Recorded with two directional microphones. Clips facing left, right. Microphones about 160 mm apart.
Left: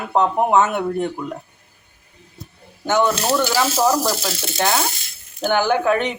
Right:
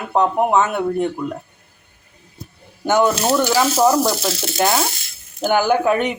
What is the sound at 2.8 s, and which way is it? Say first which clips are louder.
Speech: right 2 dB; 10° right (ahead or behind).